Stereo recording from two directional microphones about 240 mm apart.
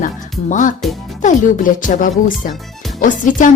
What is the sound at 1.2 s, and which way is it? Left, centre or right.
A woman's voice, left.